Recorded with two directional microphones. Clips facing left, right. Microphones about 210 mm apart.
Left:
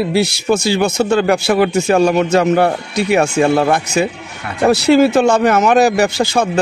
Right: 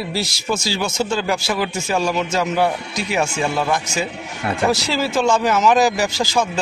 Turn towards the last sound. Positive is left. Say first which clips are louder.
# left 5 dB
turn(degrees=60)  # may be behind; listen again after turning